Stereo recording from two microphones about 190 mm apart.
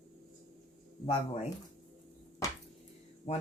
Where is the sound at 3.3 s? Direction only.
35° left (ahead or behind).